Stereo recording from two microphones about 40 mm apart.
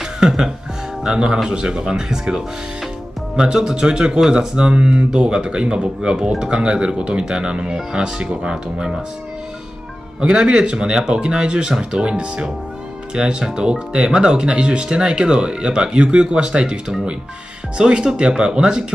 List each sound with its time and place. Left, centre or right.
0.0 s music: centre
1.0 s speech: right
10.2 s speech: right